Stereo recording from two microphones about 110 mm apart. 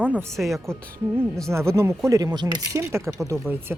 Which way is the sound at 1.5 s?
25° right (ahead or behind).